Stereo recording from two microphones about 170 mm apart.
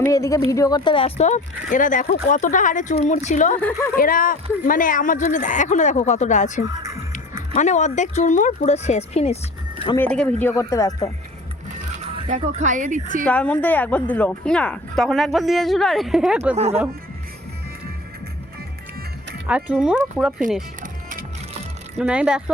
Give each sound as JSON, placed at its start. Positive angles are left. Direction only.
{"t": 0.0, "sound": "a woman's voice", "side_deg": 20}
{"t": 3.6, "sound": "speech", "side_deg": 15}
{"t": 3.9, "sound": "a woman's voice", "side_deg": 55}
{"t": 10.0, "sound": "speech", "side_deg": 5}
{"t": 12.4, "sound": "speech", "side_deg": -40}
{"t": 13.2, "sound": "speech", "side_deg": 5}
{"t": 16.6, "sound": "speech", "side_deg": -40}
{"t": 19.5, "sound": "speech", "side_deg": -5}
{"t": 20.8, "sound": "music", "side_deg": -50}
{"t": 21.9, "sound": "speech", "side_deg": -5}